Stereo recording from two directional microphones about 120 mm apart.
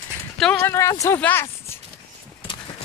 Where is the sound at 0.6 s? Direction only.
25° left (ahead or behind).